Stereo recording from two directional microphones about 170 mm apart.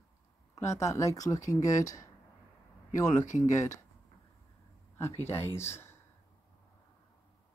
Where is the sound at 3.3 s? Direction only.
45° left (ahead or behind).